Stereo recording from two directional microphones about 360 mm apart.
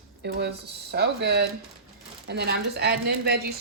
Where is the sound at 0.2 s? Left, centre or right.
Right.